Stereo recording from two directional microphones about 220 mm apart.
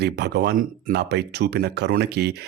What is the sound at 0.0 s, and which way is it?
Speech, 50° right (ahead or behind).